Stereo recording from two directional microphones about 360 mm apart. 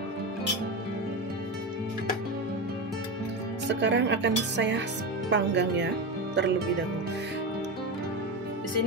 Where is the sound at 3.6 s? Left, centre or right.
Right.